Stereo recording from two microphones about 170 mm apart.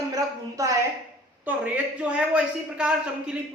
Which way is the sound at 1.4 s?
10° right (ahead or behind).